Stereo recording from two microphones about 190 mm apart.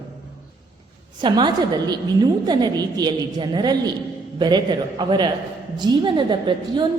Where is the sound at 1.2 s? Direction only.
25° right (ahead or behind).